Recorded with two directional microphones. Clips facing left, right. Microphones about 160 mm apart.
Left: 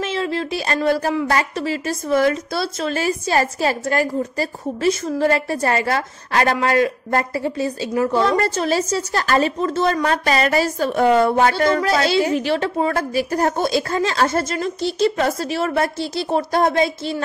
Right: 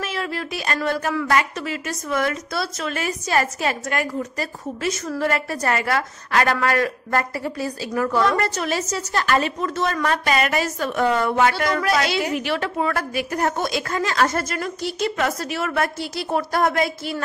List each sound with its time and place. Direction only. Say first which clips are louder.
0.0 s a woman's voice: left 5 dB; 25° left (ahead or behind)